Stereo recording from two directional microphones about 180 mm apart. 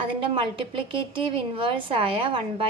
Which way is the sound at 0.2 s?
30° right (ahead or behind).